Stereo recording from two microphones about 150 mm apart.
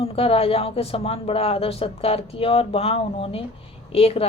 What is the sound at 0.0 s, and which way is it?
Speech, 40° left (ahead or behind).